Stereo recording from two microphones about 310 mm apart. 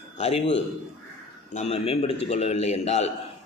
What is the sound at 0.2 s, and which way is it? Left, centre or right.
Speech, centre.